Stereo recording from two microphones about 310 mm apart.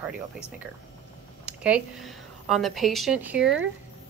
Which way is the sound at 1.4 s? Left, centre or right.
Centre.